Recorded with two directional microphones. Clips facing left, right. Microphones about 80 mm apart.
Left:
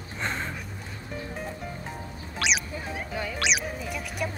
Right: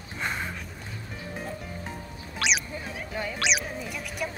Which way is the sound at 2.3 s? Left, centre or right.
Centre.